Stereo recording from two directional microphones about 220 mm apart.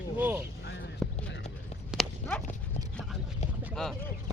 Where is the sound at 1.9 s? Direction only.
Centre (ahead or behind).